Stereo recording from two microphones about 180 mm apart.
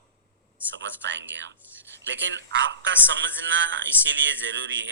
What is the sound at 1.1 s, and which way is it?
A man's voice, 90° right.